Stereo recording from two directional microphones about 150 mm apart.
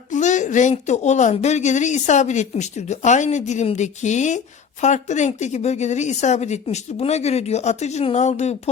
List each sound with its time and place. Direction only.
0.1 s a woman's voice: 55° left (ahead or behind)